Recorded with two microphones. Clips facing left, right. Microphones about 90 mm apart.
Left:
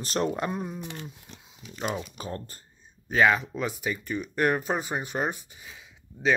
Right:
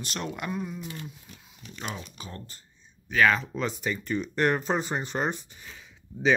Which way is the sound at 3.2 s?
10° left (ahead or behind).